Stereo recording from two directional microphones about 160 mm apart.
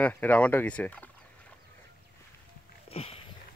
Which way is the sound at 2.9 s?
40° left (ahead or behind).